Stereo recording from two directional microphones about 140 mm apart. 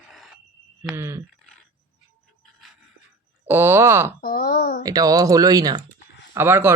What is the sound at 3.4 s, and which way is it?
Speech, 15° right (ahead or behind).